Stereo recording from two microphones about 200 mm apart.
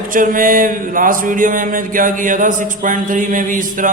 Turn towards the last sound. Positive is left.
turn(degrees=-40)  # may be behind; listen again after turning